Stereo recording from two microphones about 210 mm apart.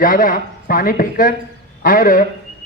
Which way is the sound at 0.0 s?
40° left (ahead or behind).